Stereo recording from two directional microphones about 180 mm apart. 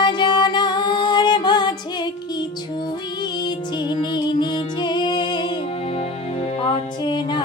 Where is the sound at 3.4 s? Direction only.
25° left (ahead or behind).